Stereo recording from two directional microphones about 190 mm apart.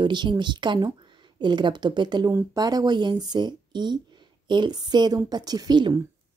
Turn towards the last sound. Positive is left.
turn(degrees=-20)  # may be behind; listen again after turning